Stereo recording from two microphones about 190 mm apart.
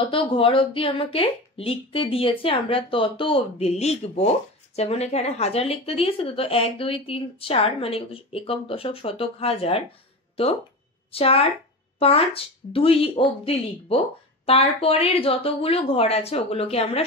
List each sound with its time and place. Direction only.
0.1 s a woman's voice: 30° left (ahead or behind)
11.1 s a woman's voice: 30° left (ahead or behind)